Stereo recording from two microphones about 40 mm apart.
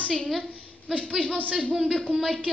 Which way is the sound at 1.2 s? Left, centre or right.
Left.